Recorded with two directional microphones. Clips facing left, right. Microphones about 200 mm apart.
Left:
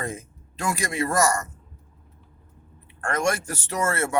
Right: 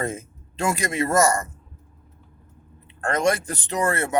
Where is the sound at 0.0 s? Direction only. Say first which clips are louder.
Right 4 dB; 25° right (ahead or behind).